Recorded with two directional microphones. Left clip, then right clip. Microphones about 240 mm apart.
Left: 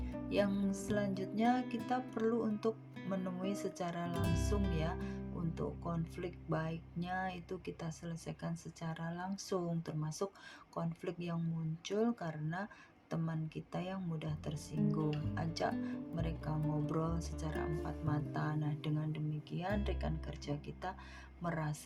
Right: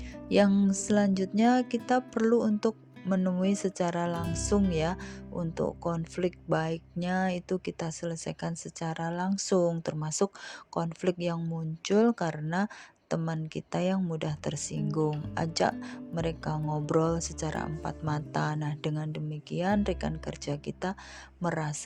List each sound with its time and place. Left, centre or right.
0.3 s speech: right
4.2 s speech: centre
4.7 s speech: right